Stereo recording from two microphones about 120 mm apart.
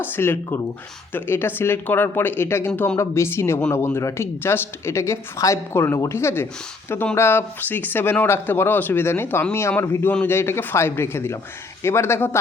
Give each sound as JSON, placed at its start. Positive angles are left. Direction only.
{"t": 0.0, "sound": "speech", "side_deg": 20}